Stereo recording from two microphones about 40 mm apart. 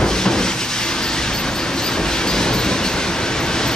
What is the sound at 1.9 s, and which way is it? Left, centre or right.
Train, centre.